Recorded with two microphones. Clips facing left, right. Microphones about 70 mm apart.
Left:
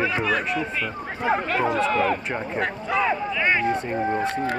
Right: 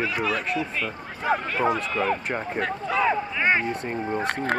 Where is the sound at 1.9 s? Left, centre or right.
Left.